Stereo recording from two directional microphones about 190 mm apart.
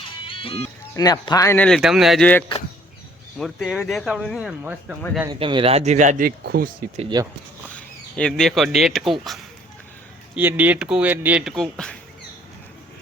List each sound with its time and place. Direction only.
0.3 s music: 30° left (ahead or behind)
0.9 s speech: 20° left (ahead or behind); by 4.9 s 5° right (ahead or behind)
5.2 s speech: 25° right (ahead or behind); by 6.7 s 55° right (ahead or behind)
7.1 s speech: 20° right (ahead or behind)
7.7 s speech: 5° left (ahead or behind)
10.3 s speech: 10° right (ahead or behind)